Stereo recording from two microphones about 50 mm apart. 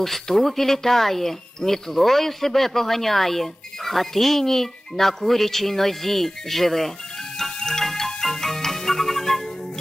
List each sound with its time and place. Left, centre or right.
0.0 s speech: centre
7.3 s music: centre